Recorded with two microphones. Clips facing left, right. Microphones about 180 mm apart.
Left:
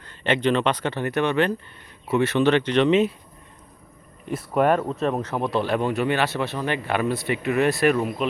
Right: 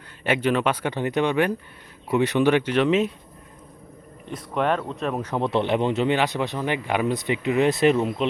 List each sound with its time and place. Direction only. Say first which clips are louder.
0.3 s speech: left 1 dB; 10° right (ahead or behind)
4.3 s speech: left 4 dB; 5° left (ahead or behind)
5.2 s speech: right 1 dB; 20° right (ahead or behind)